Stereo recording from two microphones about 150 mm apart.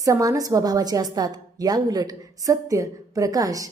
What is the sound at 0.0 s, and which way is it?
A woman's voice, 20° right (ahead or behind).